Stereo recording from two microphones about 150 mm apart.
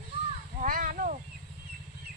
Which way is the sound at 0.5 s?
70° right (ahead or behind).